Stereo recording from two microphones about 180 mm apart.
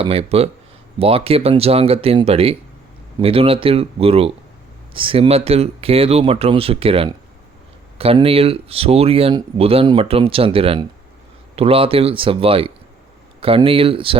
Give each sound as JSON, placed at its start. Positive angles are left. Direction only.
{"t": 0.0, "sound": "speech", "side_deg": -35}